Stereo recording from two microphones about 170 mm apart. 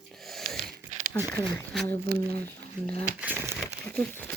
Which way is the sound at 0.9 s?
45° right (ahead or behind).